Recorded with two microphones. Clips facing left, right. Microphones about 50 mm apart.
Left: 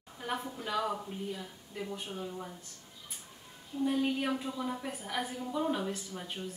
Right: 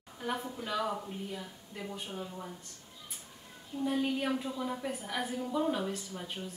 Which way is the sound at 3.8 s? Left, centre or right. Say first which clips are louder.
Even; centre.